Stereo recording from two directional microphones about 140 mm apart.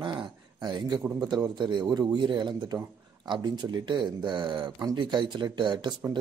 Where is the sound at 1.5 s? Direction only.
35° right (ahead or behind).